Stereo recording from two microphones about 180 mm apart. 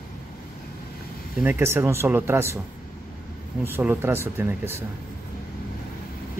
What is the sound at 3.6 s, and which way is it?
Speech, 10° right (ahead or behind).